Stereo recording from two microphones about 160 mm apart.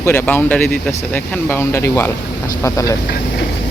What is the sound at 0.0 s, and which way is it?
Speech, 15° left (ahead or behind).